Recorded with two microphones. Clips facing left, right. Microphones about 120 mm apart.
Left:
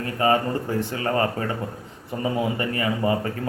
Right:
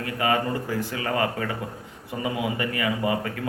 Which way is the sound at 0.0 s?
35° left (ahead or behind).